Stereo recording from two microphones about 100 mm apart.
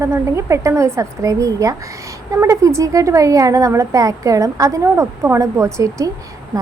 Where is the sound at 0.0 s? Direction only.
30° right (ahead or behind).